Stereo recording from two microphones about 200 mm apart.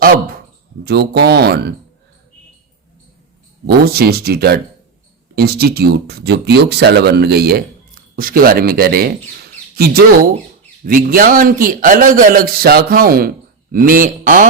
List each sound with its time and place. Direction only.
0.9 s a man's voice: 55° right (ahead or behind)
3.7 s a man's voice: 50° right (ahead or behind)